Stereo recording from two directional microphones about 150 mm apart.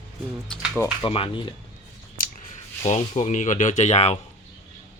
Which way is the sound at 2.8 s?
50° left (ahead or behind).